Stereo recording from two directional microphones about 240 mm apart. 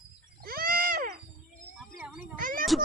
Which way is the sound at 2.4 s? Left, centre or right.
Right.